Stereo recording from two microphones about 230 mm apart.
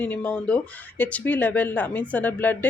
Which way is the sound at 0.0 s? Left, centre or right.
Centre.